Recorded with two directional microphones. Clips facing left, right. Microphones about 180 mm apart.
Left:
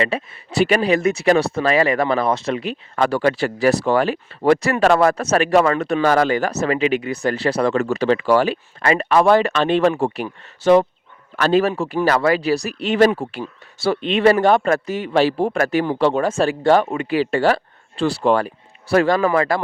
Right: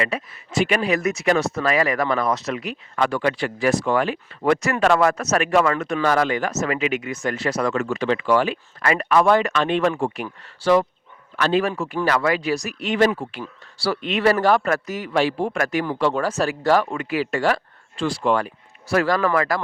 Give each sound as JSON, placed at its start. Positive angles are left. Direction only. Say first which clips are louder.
{"t": 0.0, "sound": "speech", "louder": "left 4 dB", "side_deg": 30}
{"t": 10.2, "sound": "a man's voice", "louder": "left 5 dB", "side_deg": 20}
{"t": 11.3, "sound": "a man's voice", "louder": "left 4 dB", "side_deg": 40}